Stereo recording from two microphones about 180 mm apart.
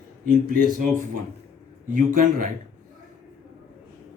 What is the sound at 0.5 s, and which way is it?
Speech, 50° right (ahead or behind).